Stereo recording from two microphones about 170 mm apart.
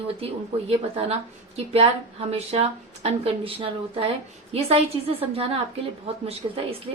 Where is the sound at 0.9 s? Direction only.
35° right (ahead or behind).